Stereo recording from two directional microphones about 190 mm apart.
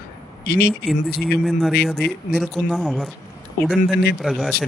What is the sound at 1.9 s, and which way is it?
Speech, 5° left (ahead or behind).